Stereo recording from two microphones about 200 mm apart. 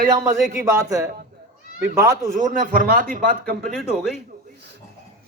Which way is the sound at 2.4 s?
40° right (ahead or behind).